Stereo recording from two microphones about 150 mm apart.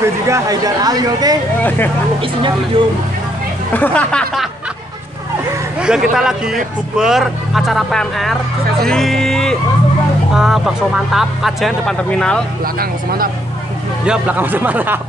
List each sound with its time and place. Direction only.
0.0 s speech: 20° right (ahead or behind)
2.8 s speech: 35° right (ahead or behind)
3.7 s speech: 10° left (ahead or behind)
5.8 s a man's voice: 5° right (ahead or behind)
12.7 s speech: 80° right
14.0 s speech: 10° right (ahead or behind)